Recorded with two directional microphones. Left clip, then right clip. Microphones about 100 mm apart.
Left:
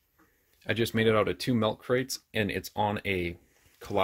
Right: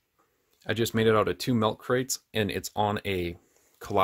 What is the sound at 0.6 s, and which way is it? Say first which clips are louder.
Speech: right 1 dB; 30° right (ahead or behind).